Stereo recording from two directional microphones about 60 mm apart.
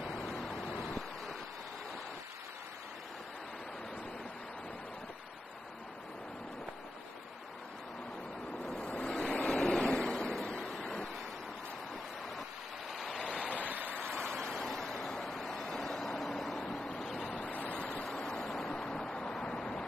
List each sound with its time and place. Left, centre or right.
0.0 s vehicle: centre
0.7 s waves: centre
8.6 s waves: centre
12.9 s waves: centre
13.7 s waves: right
14.0 s vehicle: centre
17.4 s waves: left
18.1 s waves: centre